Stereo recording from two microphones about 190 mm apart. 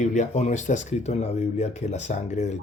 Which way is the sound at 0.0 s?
40° left (ahead or behind).